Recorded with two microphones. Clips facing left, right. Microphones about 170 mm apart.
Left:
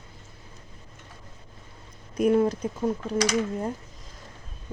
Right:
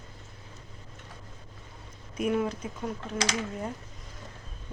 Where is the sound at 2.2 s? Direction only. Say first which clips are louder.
Left 7 dB; 40° left (ahead or behind).